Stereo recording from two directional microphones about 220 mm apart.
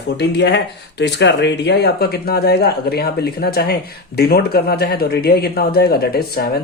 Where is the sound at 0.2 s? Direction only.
50° left (ahead or behind).